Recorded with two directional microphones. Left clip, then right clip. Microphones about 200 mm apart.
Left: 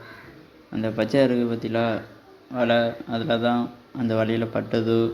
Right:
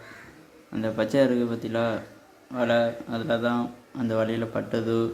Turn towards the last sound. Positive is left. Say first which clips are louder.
# left 4 dB
turn(degrees=5)  # may be behind; listen again after turning